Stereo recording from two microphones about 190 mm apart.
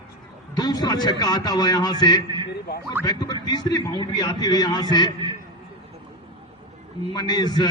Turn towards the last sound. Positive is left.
turn(degrees=25)  # may be behind; listen again after turning